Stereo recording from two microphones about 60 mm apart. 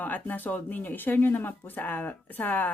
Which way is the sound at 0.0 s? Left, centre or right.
Left.